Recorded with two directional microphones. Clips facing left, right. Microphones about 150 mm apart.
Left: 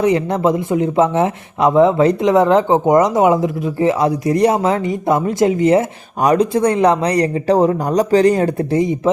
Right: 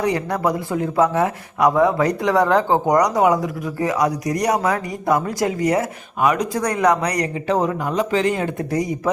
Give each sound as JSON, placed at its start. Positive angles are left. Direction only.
{"t": 0.0, "sound": "speech", "side_deg": 20}
{"t": 8.7, "sound": "speech", "side_deg": 25}